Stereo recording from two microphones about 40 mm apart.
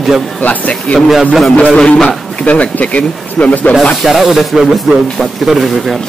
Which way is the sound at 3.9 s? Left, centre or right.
Centre.